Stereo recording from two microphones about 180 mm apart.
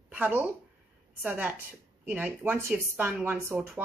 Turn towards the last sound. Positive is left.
turn(degrees=-10)  # may be behind; listen again after turning